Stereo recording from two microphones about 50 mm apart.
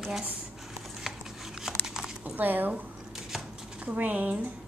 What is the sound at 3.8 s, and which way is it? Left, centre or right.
Speech, right.